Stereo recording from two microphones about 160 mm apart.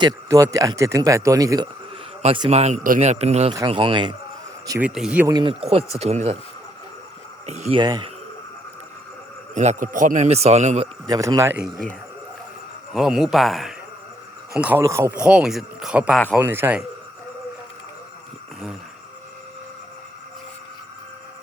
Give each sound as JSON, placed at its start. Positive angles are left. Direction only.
{"t": 0.0, "sound": "speech", "side_deg": -20}
{"t": 2.2, "sound": "a man's voice", "side_deg": -35}
{"t": 4.8, "sound": "speech", "side_deg": -5}
{"t": 5.2, "sound": "a man's voice", "side_deg": -25}
{"t": 7.4, "sound": "speech", "side_deg": -45}
{"t": 7.8, "sound": "speech", "side_deg": -25}
{"t": 9.6, "sound": "a man's voice", "side_deg": -50}
{"t": 11.0, "sound": "speech", "side_deg": -25}
{"t": 12.9, "sound": "speech", "side_deg": -5}
{"t": 14.6, "sound": "speech", "side_deg": -15}
{"t": 15.1, "sound": "speech", "side_deg": -5}